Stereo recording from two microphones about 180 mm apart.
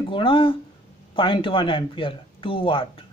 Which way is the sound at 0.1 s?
30° left (ahead or behind).